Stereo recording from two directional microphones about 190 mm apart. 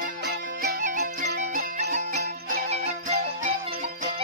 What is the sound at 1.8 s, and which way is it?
Music, 45° right (ahead or behind).